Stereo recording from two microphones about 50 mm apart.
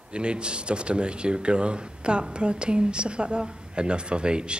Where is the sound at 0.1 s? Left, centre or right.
Centre.